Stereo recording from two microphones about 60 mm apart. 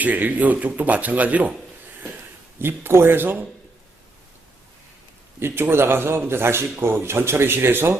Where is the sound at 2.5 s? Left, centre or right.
Right.